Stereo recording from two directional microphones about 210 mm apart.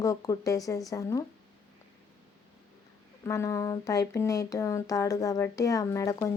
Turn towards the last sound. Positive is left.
turn(degrees=15)  # may be behind; listen again after turning